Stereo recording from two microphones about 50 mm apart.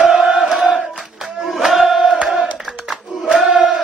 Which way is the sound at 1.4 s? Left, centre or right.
Centre.